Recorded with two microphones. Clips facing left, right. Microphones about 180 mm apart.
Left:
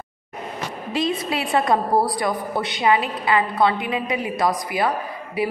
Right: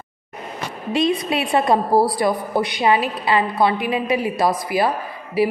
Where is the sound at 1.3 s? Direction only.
20° right (ahead or behind).